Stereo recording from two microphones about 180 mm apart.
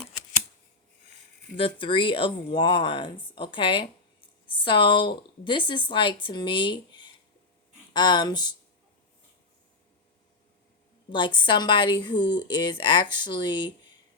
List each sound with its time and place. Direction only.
1.5 s speech: 30° left (ahead or behind)
11.3 s speech: 25° left (ahead or behind)